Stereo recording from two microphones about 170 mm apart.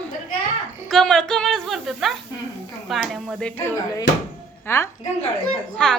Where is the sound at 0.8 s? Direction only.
Centre (ahead or behind).